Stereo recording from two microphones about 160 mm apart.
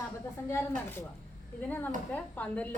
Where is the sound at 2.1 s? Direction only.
10° left (ahead or behind).